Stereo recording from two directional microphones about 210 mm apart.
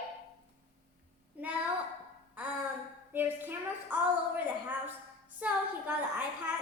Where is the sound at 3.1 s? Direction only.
10° right (ahead or behind).